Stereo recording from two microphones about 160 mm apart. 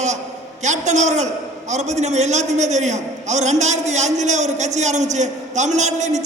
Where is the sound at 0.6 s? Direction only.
45° right (ahead or behind).